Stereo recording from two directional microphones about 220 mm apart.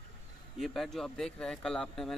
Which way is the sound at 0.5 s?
Centre (ahead or behind).